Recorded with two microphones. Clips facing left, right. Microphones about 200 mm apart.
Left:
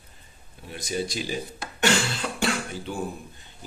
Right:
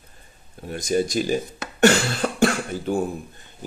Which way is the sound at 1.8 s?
45° right (ahead or behind).